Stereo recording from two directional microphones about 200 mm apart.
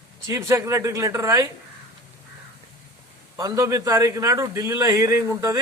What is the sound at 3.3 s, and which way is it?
A man's voice, 15° right (ahead or behind).